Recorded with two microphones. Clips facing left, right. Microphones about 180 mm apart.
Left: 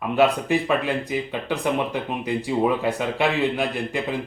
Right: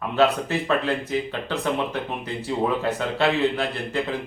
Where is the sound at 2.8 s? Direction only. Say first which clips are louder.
Even; 15° left (ahead or behind).